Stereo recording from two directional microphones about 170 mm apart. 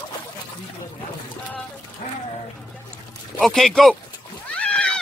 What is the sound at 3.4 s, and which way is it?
Speech, centre (ahead or behind).